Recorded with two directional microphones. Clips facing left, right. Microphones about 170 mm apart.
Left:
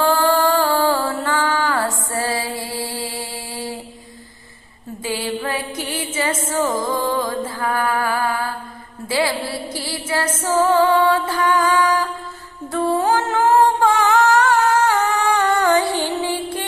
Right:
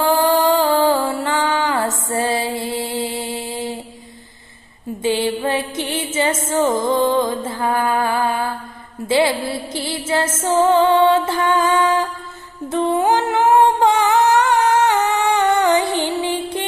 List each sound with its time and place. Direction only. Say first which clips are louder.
0.0 s music: right 1 dB; 15° right (ahead or behind)
2.0 s mantra: right 3 dB; 20° right (ahead or behind)
5.0 s music: right 5 dB; 25° right (ahead or behind)
12.9 s humming: right 1 dB; 20° right (ahead or behind)